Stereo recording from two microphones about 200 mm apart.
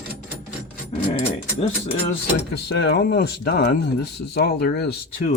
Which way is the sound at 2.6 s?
55° left (ahead or behind).